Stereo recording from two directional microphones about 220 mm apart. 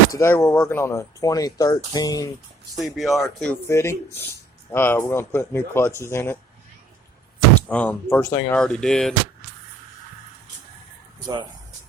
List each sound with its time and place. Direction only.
0.1 s speech: 10° left (ahead or behind)
2.7 s speech: centre (ahead or behind)
3.7 s speech: 10° left (ahead or behind)
7.7 s speech: 5° left (ahead or behind)